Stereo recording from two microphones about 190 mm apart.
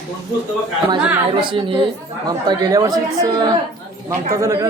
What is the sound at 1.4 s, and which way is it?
Speech, 25° right (ahead or behind).